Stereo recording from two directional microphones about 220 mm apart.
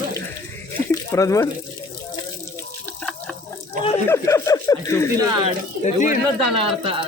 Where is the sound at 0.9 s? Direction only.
15° left (ahead or behind).